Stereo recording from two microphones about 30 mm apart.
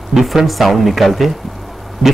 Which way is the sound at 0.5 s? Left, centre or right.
Centre.